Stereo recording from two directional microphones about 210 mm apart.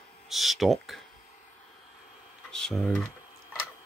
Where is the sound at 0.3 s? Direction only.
Centre (ahead or behind).